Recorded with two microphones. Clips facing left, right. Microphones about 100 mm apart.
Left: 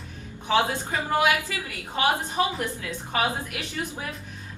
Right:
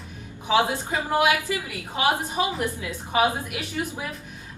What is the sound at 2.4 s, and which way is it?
A woman's voice, 15° right (ahead or behind).